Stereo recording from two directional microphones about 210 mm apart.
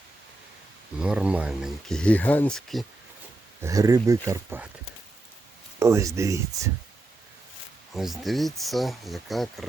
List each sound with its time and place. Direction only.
0.9 s speech: 5° right (ahead or behind)
3.6 s speech: 15° right (ahead or behind)
5.8 s speech: 15° right (ahead or behind)
7.9 s speech: centre (ahead or behind)